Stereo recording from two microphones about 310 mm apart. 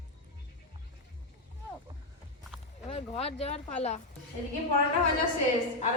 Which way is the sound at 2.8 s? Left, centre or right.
Centre.